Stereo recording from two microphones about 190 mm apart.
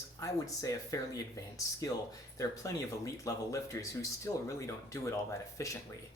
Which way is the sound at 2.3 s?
15° left (ahead or behind).